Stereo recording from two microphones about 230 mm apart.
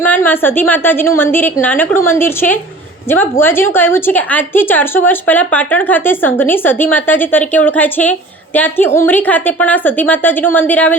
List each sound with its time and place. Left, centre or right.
0.0 s a woman's voice: centre